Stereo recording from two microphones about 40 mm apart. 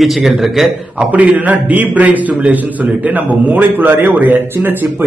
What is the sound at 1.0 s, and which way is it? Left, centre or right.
A man's voice, right.